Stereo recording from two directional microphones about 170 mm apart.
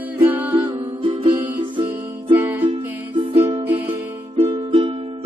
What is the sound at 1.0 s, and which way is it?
Music, 30° right (ahead or behind).